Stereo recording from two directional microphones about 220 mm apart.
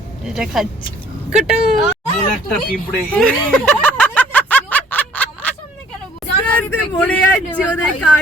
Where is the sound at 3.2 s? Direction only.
5° left (ahead or behind).